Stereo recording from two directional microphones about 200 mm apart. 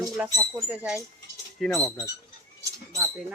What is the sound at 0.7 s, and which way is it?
Speech, 5° right (ahead or behind).